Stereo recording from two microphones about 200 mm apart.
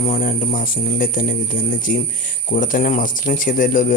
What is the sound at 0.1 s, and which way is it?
Speech, 40° left (ahead or behind).